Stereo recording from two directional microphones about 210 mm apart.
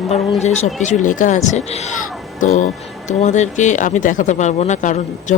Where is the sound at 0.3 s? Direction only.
35° left (ahead or behind).